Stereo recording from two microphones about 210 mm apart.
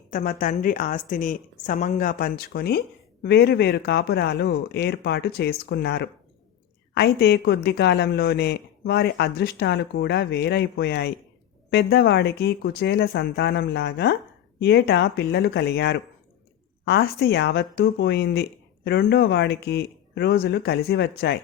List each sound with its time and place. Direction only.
0.1 s a woman's voice: 40° left (ahead or behind)